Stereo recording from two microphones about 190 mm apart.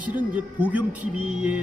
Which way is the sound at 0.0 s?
10° right (ahead or behind).